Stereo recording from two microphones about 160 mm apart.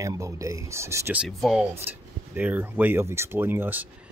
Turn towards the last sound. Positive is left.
turn(degrees=-10)  # may be behind; listen again after turning